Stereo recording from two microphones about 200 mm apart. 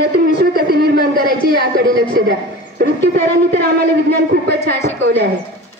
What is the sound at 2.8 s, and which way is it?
A woman's voice, 55° right (ahead or behind).